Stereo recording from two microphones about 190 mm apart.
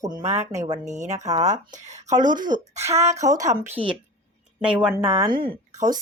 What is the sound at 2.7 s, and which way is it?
Speech, 15° right (ahead or behind).